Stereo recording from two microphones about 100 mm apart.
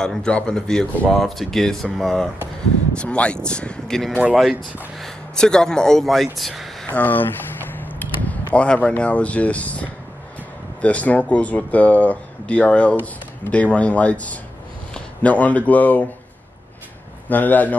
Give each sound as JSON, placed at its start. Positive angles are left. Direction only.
{"t": 0.0, "sound": "speech", "side_deg": 5}
{"t": 6.9, "sound": "a sound", "side_deg": 15}
{"t": 8.5, "sound": "speech", "side_deg": 10}
{"t": 17.3, "sound": "speech", "side_deg": 15}